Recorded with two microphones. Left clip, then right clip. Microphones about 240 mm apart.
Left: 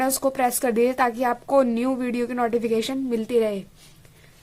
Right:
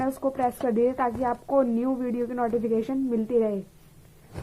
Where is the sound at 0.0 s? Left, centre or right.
Left.